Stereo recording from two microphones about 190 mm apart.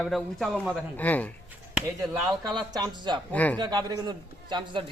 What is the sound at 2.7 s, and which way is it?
Speech, 20° right (ahead or behind).